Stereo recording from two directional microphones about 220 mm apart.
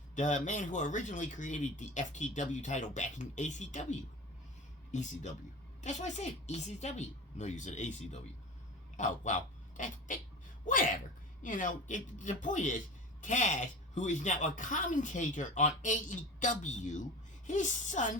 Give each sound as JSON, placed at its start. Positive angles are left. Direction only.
{"t": 0.2, "sound": "speech", "side_deg": 35}